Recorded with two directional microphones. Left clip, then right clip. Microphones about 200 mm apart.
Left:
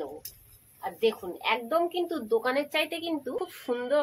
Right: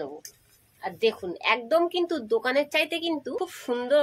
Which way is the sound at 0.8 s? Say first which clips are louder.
Right 2 dB; 45° right (ahead or behind).